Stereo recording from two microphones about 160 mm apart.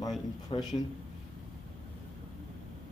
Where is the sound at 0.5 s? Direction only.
35° left (ahead or behind).